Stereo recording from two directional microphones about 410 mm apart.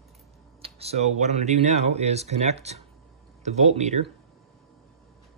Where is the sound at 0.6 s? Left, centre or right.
Centre.